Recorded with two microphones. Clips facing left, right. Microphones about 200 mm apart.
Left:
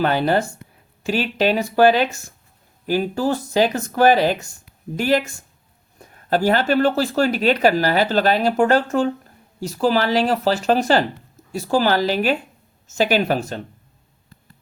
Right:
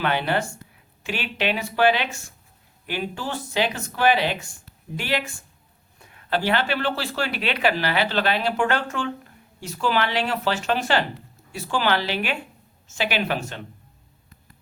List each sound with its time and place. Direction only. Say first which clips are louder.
0.0 s speech: left 5 dB; 40° left (ahead or behind)